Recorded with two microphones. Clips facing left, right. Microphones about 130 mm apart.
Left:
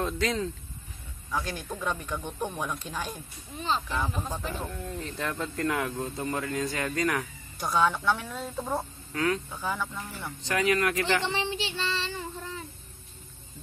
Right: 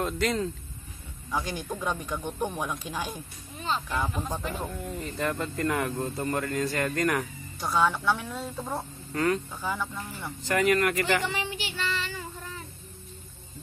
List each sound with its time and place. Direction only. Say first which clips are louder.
0.0 s speech: right 1 dB; centre (ahead or behind)
1.3 s speech: right 1 dB; 15° right (ahead or behind)
11.2 s child singing: left 2 dB; 30° left (ahead or behind)